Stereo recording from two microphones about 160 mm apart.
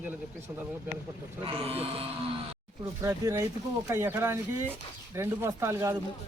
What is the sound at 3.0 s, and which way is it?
A man's voice, 20° right (ahead or behind).